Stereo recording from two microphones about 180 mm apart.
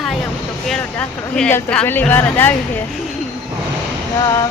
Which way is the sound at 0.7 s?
5° left (ahead or behind).